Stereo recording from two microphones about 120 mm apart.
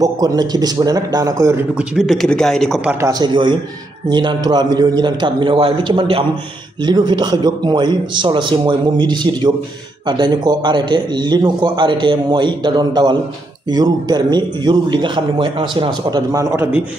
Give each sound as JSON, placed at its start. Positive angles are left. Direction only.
{"t": 0.0, "sound": "a man's voice", "side_deg": -35}
{"t": 1.8, "sound": "a man's voice", "side_deg": 0}
{"t": 3.0, "sound": "a man's voice", "side_deg": -30}